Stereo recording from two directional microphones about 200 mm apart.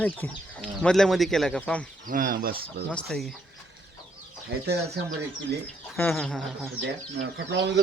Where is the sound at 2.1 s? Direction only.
45° right (ahead or behind).